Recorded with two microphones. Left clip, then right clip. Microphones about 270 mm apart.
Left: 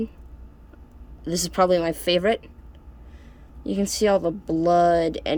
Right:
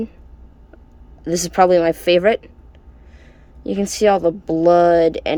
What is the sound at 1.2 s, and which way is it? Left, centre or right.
Speech, centre.